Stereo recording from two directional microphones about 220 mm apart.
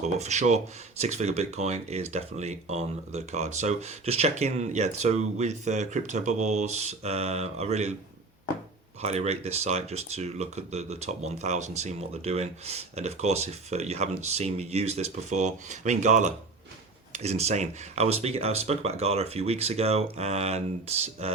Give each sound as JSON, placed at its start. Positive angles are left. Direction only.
{"t": 0.0, "sound": "speech", "side_deg": -30}
{"t": 9.0, "sound": "speech", "side_deg": -30}